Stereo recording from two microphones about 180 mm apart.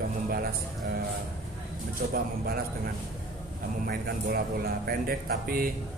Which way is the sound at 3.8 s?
60° right (ahead or behind).